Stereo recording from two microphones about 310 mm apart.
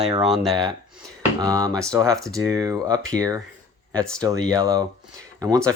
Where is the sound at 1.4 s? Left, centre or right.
Centre.